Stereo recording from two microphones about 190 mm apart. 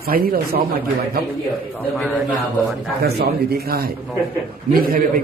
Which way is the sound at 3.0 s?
55° right (ahead or behind).